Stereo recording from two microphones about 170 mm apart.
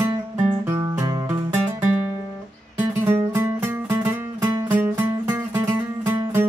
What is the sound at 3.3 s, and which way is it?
Music, 15° right (ahead or behind).